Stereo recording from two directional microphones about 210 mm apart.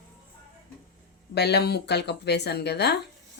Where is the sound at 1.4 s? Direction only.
50° left (ahead or behind).